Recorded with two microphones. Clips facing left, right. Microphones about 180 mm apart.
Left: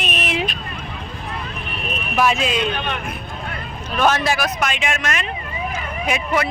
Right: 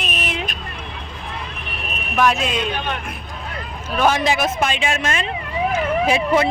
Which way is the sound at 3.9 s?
10° right (ahead or behind).